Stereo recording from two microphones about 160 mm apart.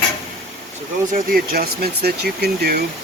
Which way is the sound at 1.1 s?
65° right (ahead or behind).